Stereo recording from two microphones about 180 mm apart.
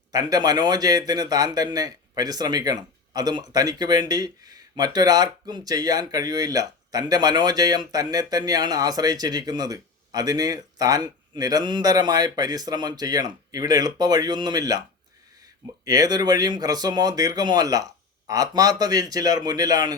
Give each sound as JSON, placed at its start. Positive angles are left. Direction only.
{"t": 0.1, "sound": "speech", "side_deg": -20}